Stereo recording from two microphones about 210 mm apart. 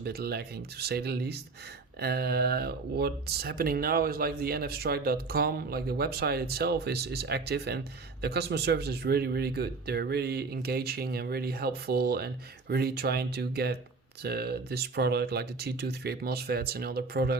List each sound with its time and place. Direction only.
0.0 s speech: 50° right (ahead or behind)